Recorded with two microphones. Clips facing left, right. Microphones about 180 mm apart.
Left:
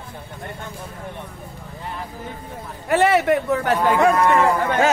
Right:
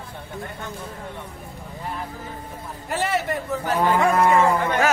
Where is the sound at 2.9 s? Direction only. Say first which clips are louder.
Left 8 dB; 65° left (ahead or behind).